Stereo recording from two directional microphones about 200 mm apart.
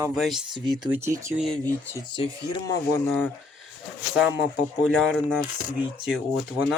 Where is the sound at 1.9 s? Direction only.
25° left (ahead or behind).